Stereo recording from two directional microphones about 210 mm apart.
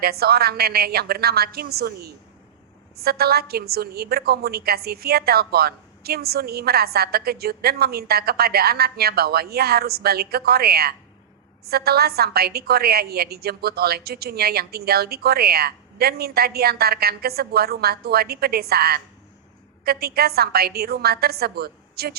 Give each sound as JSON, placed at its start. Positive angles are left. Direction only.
{"t": 0.0, "sound": "a woman's voice", "side_deg": -50}